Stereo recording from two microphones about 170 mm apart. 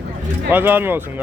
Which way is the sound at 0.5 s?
10° right (ahead or behind).